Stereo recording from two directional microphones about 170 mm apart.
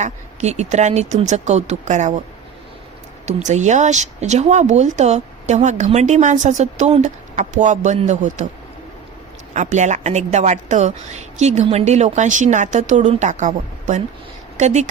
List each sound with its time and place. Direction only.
0.0 s speech: 40° right (ahead or behind)
3.2 s speech: 45° right (ahead or behind)
9.5 s speech: 45° right (ahead or behind)